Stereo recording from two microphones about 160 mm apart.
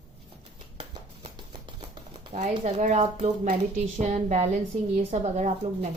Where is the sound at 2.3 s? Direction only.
45° right (ahead or behind).